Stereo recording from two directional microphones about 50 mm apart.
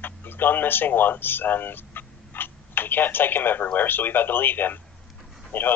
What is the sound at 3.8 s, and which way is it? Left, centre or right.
A man's voice, left.